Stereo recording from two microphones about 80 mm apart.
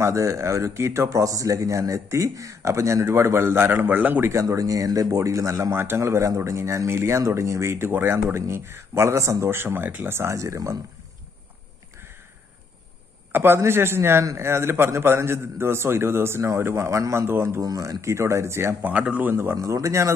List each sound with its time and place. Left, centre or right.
0.0 s speech: right
4.3 s speech: right
13.3 s speech: right
18.8 s speech: centre
19.5 s speech: right